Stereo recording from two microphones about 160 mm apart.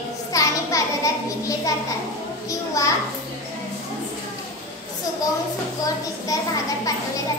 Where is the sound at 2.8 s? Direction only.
20° left (ahead or behind).